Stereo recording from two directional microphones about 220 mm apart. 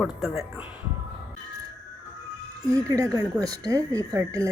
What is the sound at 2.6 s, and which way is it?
Speech, 15° right (ahead or behind).